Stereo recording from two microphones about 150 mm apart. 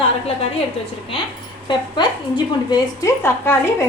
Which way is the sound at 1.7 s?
30° left (ahead or behind).